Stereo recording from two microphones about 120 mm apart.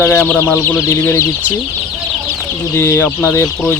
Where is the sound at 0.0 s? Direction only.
15° left (ahead or behind).